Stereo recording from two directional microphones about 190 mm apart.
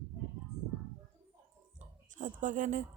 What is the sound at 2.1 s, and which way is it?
Speech, 40° right (ahead or behind).